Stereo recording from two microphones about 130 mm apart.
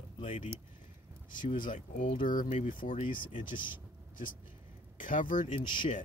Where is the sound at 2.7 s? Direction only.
90° left.